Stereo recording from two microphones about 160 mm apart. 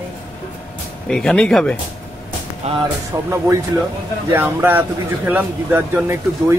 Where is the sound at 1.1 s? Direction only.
5° left (ahead or behind).